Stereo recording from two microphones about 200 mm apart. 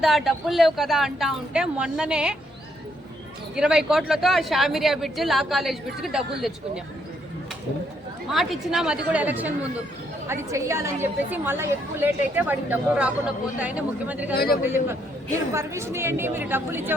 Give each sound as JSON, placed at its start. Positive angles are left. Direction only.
{"t": 0.0, "sound": "speech", "side_deg": 0}
{"t": 3.5, "sound": "speech", "side_deg": -5}
{"t": 8.3, "sound": "a woman's voice", "side_deg": 0}
{"t": 14.3, "sound": "a man's voice", "side_deg": 50}
{"t": 15.5, "sound": "a woman's voice", "side_deg": -15}